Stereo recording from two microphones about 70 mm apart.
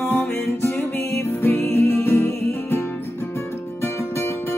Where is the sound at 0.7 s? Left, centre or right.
Left.